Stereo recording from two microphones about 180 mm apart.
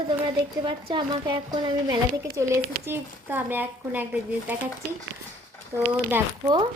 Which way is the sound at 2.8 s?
10° right (ahead or behind).